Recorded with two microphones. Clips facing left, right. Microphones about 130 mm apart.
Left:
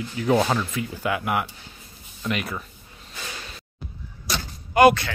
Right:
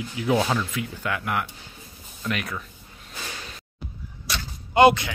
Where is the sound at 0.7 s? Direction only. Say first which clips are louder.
Left 3 dB; 10° left (ahead or behind).